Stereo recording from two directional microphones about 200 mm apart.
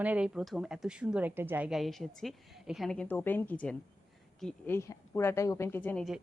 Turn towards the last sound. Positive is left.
turn(degrees=5)  # may be behind; listen again after turning